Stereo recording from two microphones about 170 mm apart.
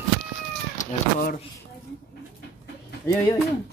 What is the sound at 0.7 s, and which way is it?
Cat, 55° left (ahead or behind).